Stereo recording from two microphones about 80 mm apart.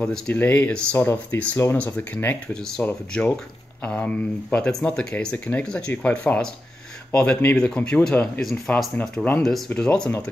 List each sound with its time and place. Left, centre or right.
0.3 s speech: left
0.9 s speech: left
2.5 s speech: centre
8.4 s speech: centre
8.9 s speech: centre
9.4 s speech: centre